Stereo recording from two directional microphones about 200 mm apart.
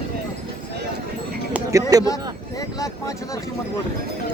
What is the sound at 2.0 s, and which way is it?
Speech, 15° left (ahead or behind).